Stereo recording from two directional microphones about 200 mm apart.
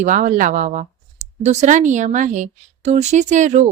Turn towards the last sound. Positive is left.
turn(degrees=-35)  # may be behind; listen again after turning